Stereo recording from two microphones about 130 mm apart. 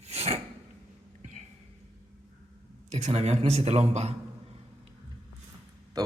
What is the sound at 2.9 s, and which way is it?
Speech, 60° right (ahead or behind).